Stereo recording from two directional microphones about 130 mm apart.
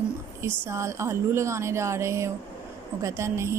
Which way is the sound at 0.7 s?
20° right (ahead or behind).